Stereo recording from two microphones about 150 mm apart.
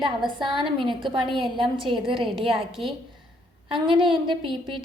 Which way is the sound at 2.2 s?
Centre (ahead or behind).